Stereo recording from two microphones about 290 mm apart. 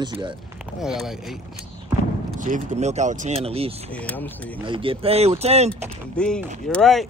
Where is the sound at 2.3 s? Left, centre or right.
Right.